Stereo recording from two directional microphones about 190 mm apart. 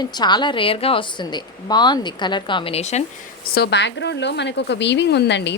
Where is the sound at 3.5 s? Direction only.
60° left (ahead or behind).